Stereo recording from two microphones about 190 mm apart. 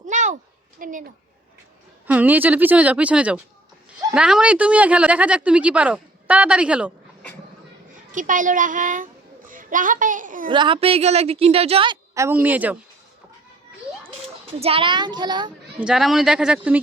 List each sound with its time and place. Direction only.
0.0 s a sound: 40° right (ahead or behind)
0.8 s a child's voice: 45° right (ahead or behind)
2.0 s speech: 10° right (ahead or behind)
8.1 s a child's voice: 45° right (ahead or behind)
10.5 s a woman's voice: 25° right (ahead or behind)
12.1 s speech: 15° right (ahead or behind)
14.6 s a child's voice: 30° right (ahead or behind)
15.8 s speech: centre (ahead or behind)